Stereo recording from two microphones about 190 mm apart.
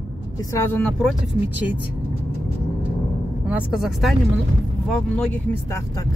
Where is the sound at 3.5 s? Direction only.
5° right (ahead or behind).